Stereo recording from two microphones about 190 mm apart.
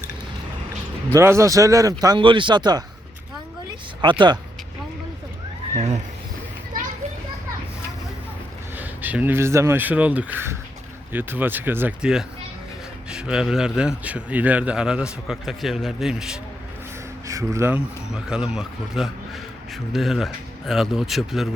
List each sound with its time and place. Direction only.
1.1 s speech: 15° right (ahead or behind)
4.0 s speech: 25° right (ahead or behind)
5.7 s speech: 35° right (ahead or behind)
8.7 s a man's voice: 10° right (ahead or behind)
17.2 s speech: 15° right (ahead or behind)
18.1 s a man's voice: 5° right (ahead or behind)